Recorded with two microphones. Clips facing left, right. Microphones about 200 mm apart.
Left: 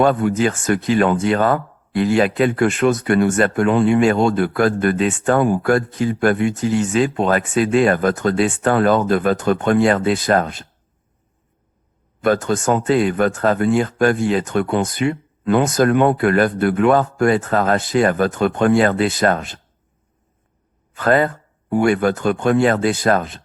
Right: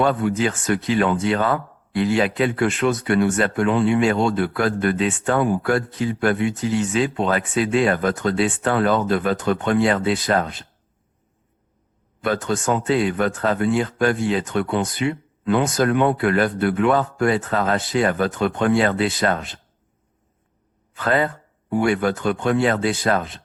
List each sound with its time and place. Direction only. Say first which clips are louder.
0.0 s speech: left 4 dB; 45° left (ahead or behind)
12.2 s speech: left 5 dB; 45° left (ahead or behind)
20.9 s speech: left 4 dB; 45° left (ahead or behind)